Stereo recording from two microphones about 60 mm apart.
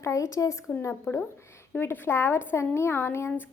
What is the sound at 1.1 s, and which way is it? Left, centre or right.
A woman's voice, left.